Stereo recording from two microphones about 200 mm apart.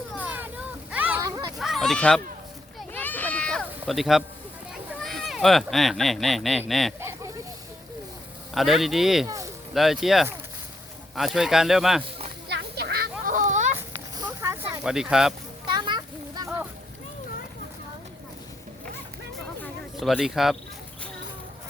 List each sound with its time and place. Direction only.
0.1 s a sound: 10° right (ahead or behind)
2.7 s children playing: 10° left (ahead or behind)
4.7 s speech: centre (ahead or behind)
7.0 s a sound: 10° right (ahead or behind)
8.5 s speech: centre (ahead or behind)
9.2 s a sound: 15° right (ahead or behind)
9.7 s speech: centre (ahead or behind)
12.5 s children playing: 50° right (ahead or behind)
14.2 s a sound: 15° right (ahead or behind)
14.8 s speech: 5° right (ahead or behind)
15.6 s children playing: 25° right (ahead or behind)
20.0 s speech: centre (ahead or behind)